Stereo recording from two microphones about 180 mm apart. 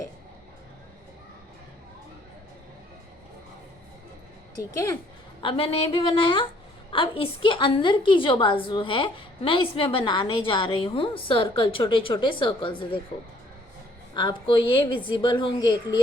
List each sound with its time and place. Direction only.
4.7 s a woman's voice: 15° left (ahead or behind)
5.4 s a woman's voice: 30° left (ahead or behind)
14.1 s a woman's voice: 25° left (ahead or behind)